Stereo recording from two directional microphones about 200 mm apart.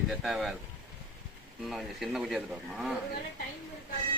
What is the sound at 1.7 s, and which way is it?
Speech, centre (ahead or behind).